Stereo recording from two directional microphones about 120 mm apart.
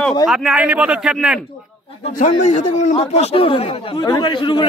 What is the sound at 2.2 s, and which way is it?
A man's voice, 70° left (ahead or behind).